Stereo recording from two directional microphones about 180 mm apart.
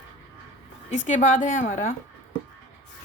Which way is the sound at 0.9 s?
45° left (ahead or behind).